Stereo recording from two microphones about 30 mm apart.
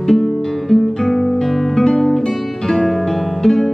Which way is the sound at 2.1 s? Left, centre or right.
Centre.